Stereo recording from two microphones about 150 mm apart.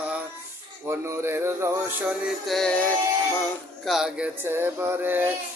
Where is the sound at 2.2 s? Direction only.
Centre (ahead or behind).